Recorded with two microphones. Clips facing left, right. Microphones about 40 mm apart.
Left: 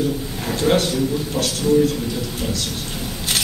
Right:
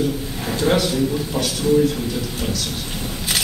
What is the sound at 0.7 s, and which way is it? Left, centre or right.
Speech, centre.